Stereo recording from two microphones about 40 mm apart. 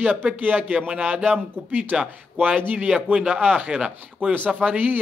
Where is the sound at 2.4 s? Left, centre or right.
Right.